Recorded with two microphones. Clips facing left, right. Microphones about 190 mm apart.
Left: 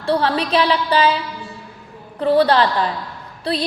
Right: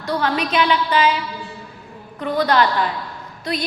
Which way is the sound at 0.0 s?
30° left (ahead or behind).